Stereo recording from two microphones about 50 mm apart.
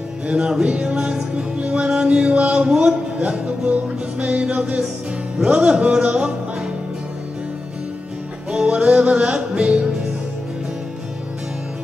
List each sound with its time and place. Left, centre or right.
0.3 s music: centre
3.2 s music: right
8.5 s music: centre